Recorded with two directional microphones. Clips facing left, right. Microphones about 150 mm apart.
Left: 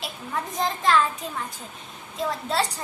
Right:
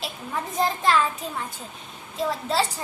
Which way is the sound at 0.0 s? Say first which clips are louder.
Even; centre (ahead or behind).